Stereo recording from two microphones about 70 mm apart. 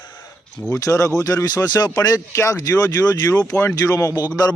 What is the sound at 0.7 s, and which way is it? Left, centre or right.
Speech, left.